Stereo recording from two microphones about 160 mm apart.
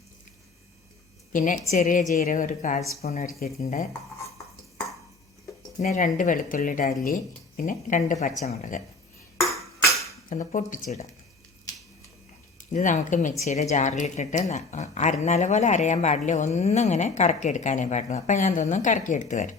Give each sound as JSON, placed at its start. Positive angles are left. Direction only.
{"t": 1.3, "sound": "a woman's voice", "side_deg": 55}
{"t": 5.8, "sound": "a woman's voice", "side_deg": 50}
{"t": 10.2, "sound": "a woman's voice", "side_deg": 55}
{"t": 12.5, "sound": "a woman's voice", "side_deg": 50}